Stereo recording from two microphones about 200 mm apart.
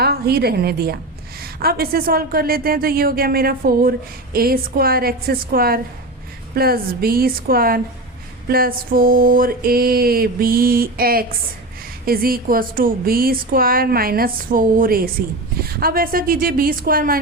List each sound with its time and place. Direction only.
0.0 s a woman's voice: 50° right (ahead or behind)